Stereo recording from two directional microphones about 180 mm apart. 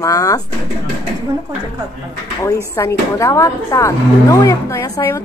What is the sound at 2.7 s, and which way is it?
Speech, 15° left (ahead or behind).